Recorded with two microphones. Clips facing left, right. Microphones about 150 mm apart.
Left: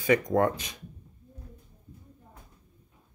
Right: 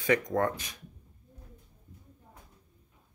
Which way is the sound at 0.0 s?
10° left (ahead or behind).